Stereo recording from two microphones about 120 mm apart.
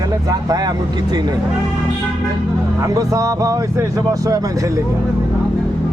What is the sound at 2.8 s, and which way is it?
Speech, 25° right (ahead or behind).